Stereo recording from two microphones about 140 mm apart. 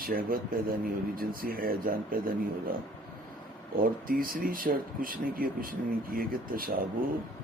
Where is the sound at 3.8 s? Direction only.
90° right.